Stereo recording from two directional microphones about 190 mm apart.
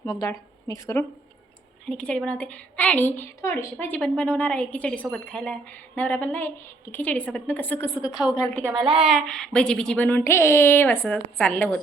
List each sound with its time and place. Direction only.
0.0 s speech: 20° left (ahead or behind)
1.9 s a woman's voice: 5° left (ahead or behind)
8.7 s a woman's voice: 25° right (ahead or behind)
9.0 s a woman's voice: centre (ahead or behind)